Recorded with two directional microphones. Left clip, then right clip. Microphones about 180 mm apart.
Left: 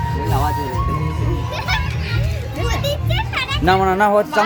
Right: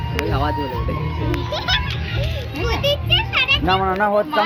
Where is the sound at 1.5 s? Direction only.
20° left (ahead or behind).